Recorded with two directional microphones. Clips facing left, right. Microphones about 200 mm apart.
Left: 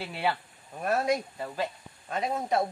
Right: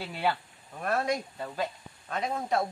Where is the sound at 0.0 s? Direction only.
Centre (ahead or behind).